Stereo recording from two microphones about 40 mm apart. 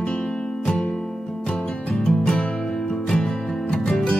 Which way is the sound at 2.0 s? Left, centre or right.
Left.